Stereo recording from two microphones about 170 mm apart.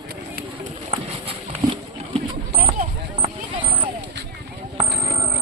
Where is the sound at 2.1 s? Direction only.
40° right (ahead or behind).